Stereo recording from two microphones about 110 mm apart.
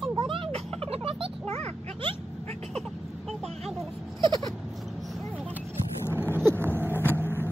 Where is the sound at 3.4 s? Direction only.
Centre (ahead or behind).